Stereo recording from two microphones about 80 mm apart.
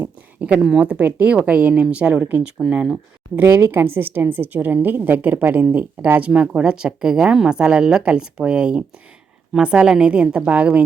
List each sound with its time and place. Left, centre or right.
0.4 s a woman's voice: centre
3.3 s a woman's voice: right; by 10.8 s centre